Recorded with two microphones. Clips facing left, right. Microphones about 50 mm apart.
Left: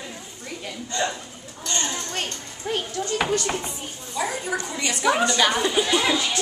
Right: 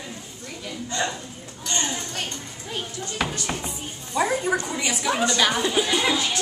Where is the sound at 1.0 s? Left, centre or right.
Centre.